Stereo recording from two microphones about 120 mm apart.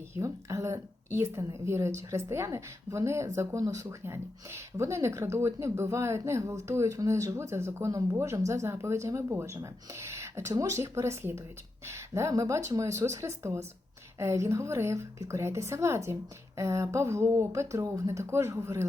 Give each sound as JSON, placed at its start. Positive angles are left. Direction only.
{"t": 0.1, "sound": "speech", "side_deg": -25}